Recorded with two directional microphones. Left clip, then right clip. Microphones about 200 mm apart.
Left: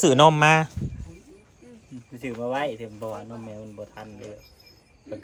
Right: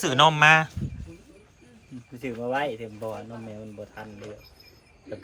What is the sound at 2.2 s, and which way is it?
Speech, centre (ahead or behind).